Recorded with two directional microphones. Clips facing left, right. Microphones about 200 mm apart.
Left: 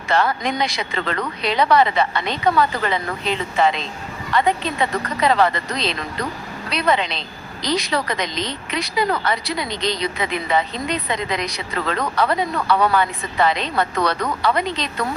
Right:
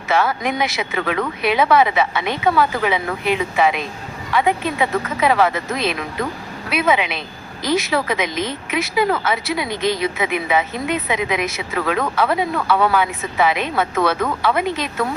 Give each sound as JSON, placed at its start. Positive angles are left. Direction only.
{"t": 0.1, "sound": "speech", "side_deg": -5}
{"t": 7.2, "sound": "a woman's voice", "side_deg": 20}
{"t": 7.9, "sound": "speech", "side_deg": -5}
{"t": 9.6, "sound": "speech", "side_deg": 20}
{"t": 10.0, "sound": "speech", "side_deg": -5}